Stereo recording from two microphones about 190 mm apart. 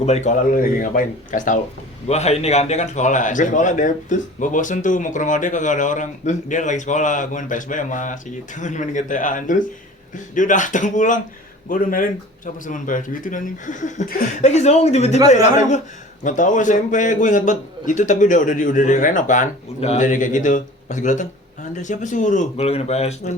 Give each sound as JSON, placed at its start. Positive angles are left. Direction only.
{"t": 0.0, "sound": "speech", "side_deg": 35}